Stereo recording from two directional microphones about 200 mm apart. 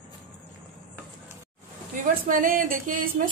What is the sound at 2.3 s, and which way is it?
A woman's voice, 45° right (ahead or behind).